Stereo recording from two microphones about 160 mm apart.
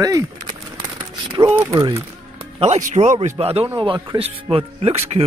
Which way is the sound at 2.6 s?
45° right (ahead or behind).